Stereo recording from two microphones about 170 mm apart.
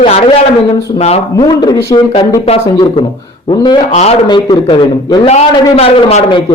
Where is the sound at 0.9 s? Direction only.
35° left (ahead or behind).